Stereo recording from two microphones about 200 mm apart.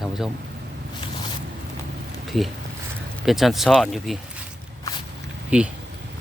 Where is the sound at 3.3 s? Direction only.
Centre (ahead or behind).